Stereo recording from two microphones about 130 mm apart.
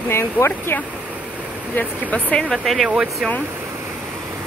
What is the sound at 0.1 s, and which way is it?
Speech, 15° left (ahead or behind).